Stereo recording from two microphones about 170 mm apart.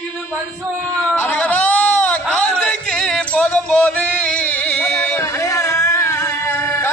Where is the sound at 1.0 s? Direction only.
10° left (ahead or behind).